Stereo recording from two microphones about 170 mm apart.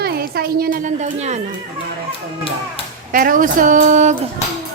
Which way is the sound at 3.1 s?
55° right (ahead or behind).